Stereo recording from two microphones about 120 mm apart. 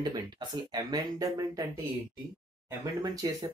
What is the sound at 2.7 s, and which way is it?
Speech, 30° right (ahead or behind).